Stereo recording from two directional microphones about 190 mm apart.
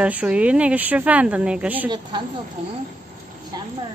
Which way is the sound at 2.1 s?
25° right (ahead or behind).